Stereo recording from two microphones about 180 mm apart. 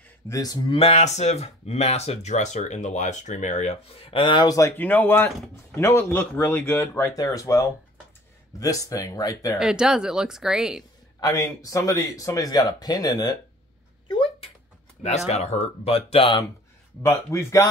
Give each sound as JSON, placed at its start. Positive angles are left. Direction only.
{"t": 0.3, "sound": "speech", "side_deg": 20}
{"t": 0.7, "sound": "speech", "side_deg": 35}
{"t": 9.6, "sound": "speech", "side_deg": -5}
{"t": 11.1, "sound": "speech", "side_deg": 20}
{"t": 14.0, "sound": "a sound", "side_deg": 30}
{"t": 15.0, "sound": "speech", "side_deg": 40}
{"t": 17.0, "sound": "speech", "side_deg": 15}